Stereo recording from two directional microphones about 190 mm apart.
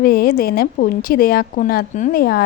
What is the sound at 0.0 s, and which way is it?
A woman's voice, 50° left (ahead or behind).